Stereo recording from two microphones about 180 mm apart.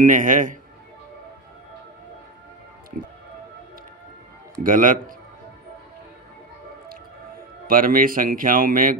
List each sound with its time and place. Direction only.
0.0 s speech: 45° right (ahead or behind)
4.6 s speech: 50° right (ahead or behind)
7.6 s speech: 50° right (ahead or behind)